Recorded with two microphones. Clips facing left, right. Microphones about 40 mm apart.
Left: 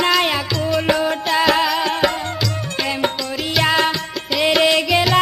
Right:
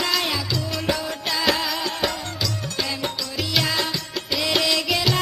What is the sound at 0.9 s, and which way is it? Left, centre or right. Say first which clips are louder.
Music: left 9 dB; left.